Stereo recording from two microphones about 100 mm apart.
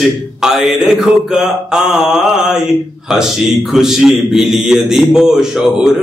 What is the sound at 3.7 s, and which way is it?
A man's voice, 5° right (ahead or behind).